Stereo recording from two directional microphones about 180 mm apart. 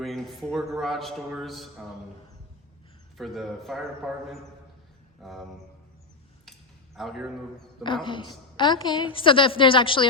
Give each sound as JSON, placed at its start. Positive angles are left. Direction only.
{"t": 0.0, "sound": "a man's voice", "side_deg": 0}
{"t": 3.2, "sound": "a man's voice", "side_deg": 0}
{"t": 6.9, "sound": "a man's voice", "side_deg": 0}
{"t": 7.9, "sound": "a woman's voice", "side_deg": 25}